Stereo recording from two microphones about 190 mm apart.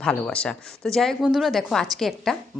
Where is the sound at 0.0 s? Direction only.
5° left (ahead or behind).